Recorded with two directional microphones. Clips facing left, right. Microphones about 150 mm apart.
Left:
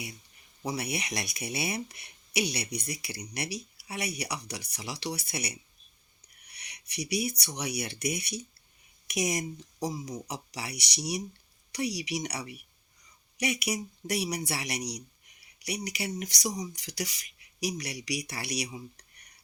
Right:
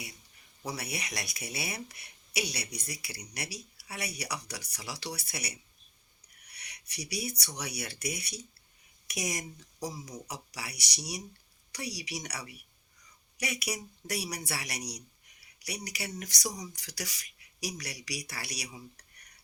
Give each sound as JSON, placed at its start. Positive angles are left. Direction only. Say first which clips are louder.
{"t": 0.6, "sound": "speech", "louder": "left 5 dB", "side_deg": 15}